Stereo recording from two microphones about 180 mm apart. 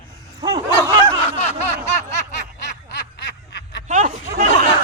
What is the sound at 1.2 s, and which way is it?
Snicker, 35° left (ahead or behind).